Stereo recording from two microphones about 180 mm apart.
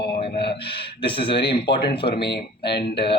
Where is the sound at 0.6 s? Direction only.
30° left (ahead or behind).